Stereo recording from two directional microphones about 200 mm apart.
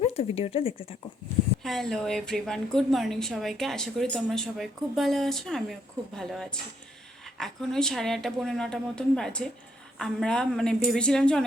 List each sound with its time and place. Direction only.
0.0 s speech: 30° left (ahead or behind)
1.6 s a woman's voice: centre (ahead or behind)